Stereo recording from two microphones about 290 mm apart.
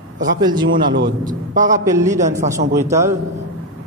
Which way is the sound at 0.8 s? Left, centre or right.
Right.